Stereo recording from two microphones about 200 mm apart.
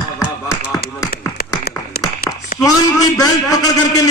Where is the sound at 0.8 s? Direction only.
50° left (ahead or behind).